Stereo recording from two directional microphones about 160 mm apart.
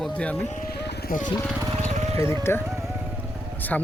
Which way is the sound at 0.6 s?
75° left (ahead or behind).